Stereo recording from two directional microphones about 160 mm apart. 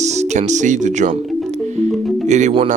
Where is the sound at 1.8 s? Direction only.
45° right (ahead or behind).